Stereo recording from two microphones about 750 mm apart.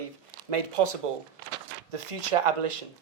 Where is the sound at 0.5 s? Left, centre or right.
Right.